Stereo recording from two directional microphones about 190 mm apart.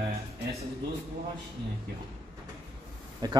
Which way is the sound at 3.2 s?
20° right (ahead or behind).